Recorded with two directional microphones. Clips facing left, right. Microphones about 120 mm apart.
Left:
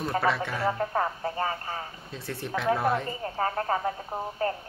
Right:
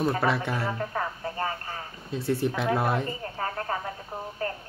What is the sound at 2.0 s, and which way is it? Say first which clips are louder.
Speech: right 9 dB; 10° right (ahead or behind).